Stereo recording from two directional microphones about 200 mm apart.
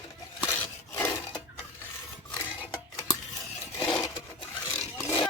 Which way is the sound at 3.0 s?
15° left (ahead or behind).